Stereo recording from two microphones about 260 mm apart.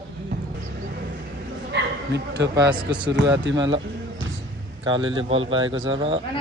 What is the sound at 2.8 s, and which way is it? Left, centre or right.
Speech, centre.